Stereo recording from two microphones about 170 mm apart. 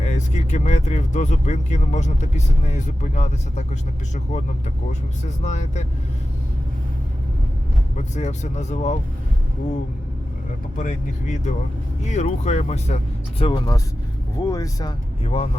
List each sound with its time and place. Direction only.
0.0 s speech: 40° left (ahead or behind)
5.5 s speech: 45° left (ahead or behind)
7.9 s speech: 40° left (ahead or behind)
10.8 s speech: 45° left (ahead or behind)
13.5 s speech: 20° left (ahead or behind)
15.2 s speech: 35° left (ahead or behind)